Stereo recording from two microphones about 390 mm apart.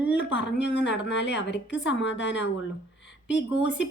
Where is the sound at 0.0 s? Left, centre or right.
Centre.